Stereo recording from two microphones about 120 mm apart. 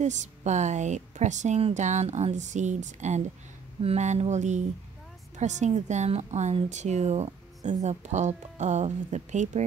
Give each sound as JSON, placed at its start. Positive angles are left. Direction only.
{"t": 0.0, "sound": "a woman's voice", "side_deg": -80}